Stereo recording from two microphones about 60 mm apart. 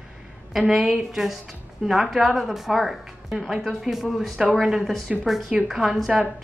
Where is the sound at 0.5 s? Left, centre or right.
Centre.